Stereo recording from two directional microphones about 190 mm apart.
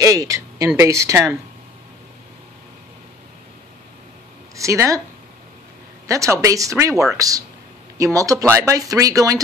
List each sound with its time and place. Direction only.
0.0 s a sound: 20° right (ahead or behind)
0.7 s speech: 15° right (ahead or behind)
4.6 s speech: 15° right (ahead or behind)
6.0 s speech: 15° right (ahead or behind)